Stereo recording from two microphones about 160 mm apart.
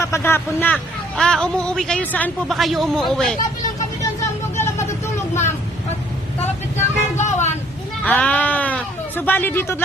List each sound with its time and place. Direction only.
0.0 s a man's voice: 15° left (ahead or behind)
4.0 s vehicle: 20° left (ahead or behind)
6.4 s speech: 45° left (ahead or behind)
8.0 s speech: 10° left (ahead or behind)